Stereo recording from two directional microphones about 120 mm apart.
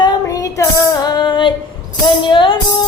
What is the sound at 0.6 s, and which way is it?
Music, 35° left (ahead or behind).